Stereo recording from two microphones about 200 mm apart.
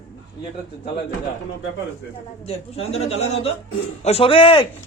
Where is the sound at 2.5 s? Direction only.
30° left (ahead or behind).